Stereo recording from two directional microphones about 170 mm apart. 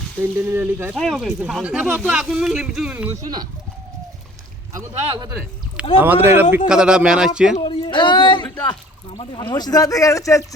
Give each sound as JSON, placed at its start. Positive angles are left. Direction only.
{"t": 0.2, "sound": "speech", "side_deg": -15}
{"t": 0.9, "sound": "speech", "side_deg": 0}
{"t": 5.0, "sound": "speech", "side_deg": -30}
{"t": 6.0, "sound": "speech", "side_deg": -10}
{"t": 7.6, "sound": "speech", "side_deg": 30}